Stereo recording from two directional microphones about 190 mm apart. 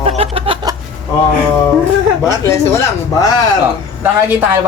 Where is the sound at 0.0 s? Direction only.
30° right (ahead or behind).